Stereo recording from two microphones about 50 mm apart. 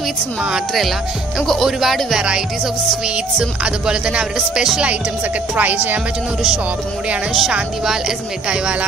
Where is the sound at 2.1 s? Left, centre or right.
Centre.